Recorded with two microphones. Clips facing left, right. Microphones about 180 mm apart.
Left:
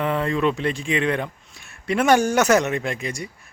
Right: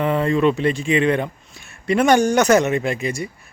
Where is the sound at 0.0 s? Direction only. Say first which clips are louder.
Right 4 dB; centre (ahead or behind).